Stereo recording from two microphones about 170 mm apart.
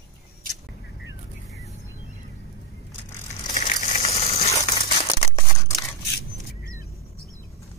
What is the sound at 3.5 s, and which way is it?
Crumpling, 40° left (ahead or behind).